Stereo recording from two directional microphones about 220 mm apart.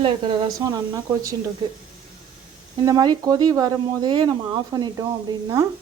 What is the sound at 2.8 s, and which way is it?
Speech, 20° right (ahead or behind).